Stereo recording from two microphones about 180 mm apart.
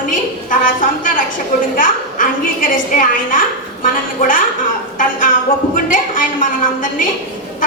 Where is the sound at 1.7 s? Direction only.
50° left (ahead or behind).